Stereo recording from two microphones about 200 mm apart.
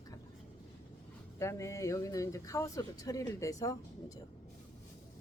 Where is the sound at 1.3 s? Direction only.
15° left (ahead or behind).